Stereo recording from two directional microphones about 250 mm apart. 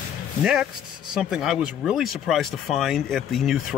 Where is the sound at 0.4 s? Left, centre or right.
Centre.